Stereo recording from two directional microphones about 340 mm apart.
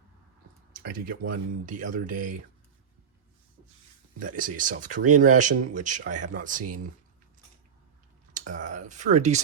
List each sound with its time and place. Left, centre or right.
0.7 s speech: right
4.2 s speech: right
8.3 s speech: right